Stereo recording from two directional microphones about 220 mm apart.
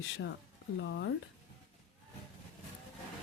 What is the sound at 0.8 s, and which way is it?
Speech, 55° left (ahead or behind).